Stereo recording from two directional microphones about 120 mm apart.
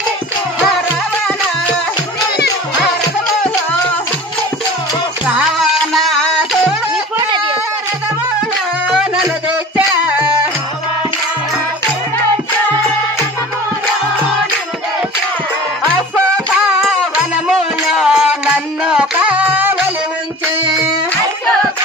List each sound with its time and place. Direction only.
5.2 s music: 10° right (ahead or behind)
7.2 s a sound: 35° right (ahead or behind)
8.8 s music: 5° right (ahead or behind)
17.5 s music: centre (ahead or behind)